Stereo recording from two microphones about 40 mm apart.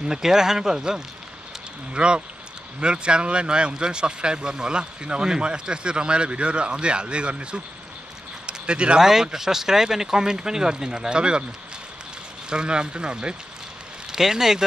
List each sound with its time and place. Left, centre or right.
0.0 s speech: centre
9.0 s speech: centre
12.4 s speech: right
14.1 s speech: centre